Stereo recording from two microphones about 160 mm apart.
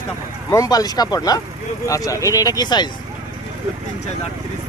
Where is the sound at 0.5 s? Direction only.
25° left (ahead or behind).